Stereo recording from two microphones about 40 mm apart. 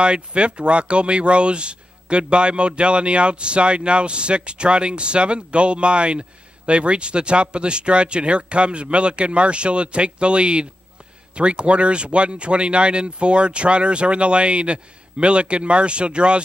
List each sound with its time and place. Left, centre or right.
0.0 s speech: right